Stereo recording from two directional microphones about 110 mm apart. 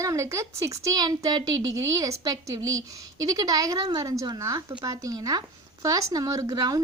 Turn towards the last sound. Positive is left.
turn(degrees=-35)  # may be behind; listen again after turning